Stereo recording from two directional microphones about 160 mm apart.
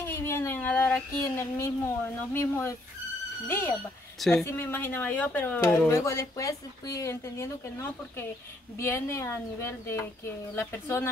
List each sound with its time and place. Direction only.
0.0 s speech: 15° left (ahead or behind)
4.2 s speech: 5° left (ahead or behind)
4.5 s speech: 15° left (ahead or behind)